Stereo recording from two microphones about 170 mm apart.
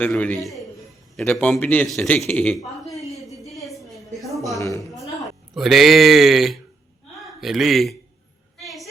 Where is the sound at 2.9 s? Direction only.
Centre (ahead or behind).